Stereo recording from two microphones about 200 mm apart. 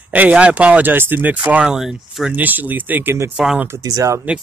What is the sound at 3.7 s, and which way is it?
Speech, 15° right (ahead or behind).